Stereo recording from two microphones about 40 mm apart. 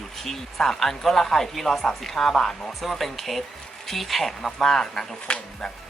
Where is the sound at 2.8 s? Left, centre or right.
Centre.